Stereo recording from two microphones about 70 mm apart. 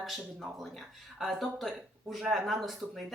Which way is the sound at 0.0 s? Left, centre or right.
Centre.